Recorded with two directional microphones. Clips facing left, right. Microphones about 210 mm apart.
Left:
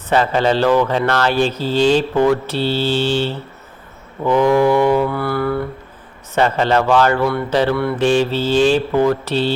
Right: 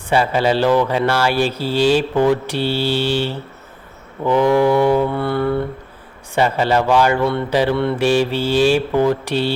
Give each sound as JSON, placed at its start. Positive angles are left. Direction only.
{"t": 0.1, "sound": "speech", "side_deg": -10}
{"t": 4.2, "sound": "mantra", "side_deg": -15}
{"t": 6.3, "sound": "speech", "side_deg": -10}